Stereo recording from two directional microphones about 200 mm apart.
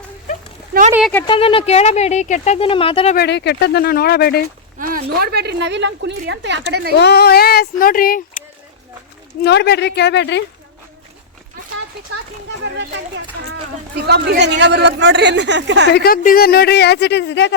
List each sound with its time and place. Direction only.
1.3 s speech: 25° left (ahead or behind)
3.2 s speech: 60° left (ahead or behind)
4.8 s a man's voice: 45° right (ahead or behind); by 6.7 s 65° right (ahead or behind)
7.0 s speech: 55° left (ahead or behind)
9.4 s speech: 55° left (ahead or behind)
13.5 s a man's voice: 55° right (ahead or behind)
15.9 s speech: 50° left (ahead or behind)